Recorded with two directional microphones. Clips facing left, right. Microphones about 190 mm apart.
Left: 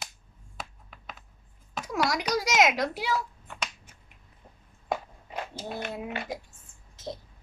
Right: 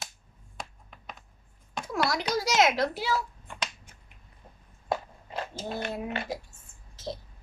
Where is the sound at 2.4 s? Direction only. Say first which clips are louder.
Right 1 dB; 15° left (ahead or behind).